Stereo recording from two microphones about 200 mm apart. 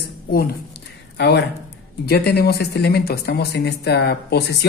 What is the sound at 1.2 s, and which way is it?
Speech, 55° left (ahead or behind).